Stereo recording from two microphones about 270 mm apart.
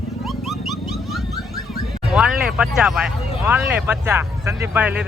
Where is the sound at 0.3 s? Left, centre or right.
Centre.